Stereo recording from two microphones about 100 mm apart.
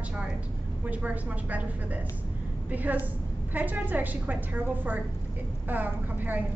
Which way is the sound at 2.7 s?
15° right (ahead or behind).